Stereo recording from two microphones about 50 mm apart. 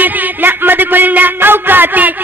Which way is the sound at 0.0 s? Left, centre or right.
Right.